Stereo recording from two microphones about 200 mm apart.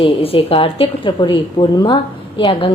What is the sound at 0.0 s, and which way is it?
A woman's voice, 30° left (ahead or behind).